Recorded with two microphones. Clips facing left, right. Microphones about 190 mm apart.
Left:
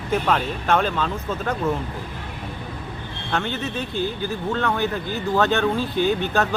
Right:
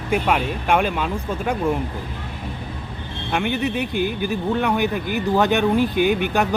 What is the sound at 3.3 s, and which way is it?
Speech, 15° right (ahead or behind).